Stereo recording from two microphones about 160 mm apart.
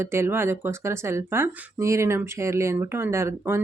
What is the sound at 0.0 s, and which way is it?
A woman's voice, 15° right (ahead or behind).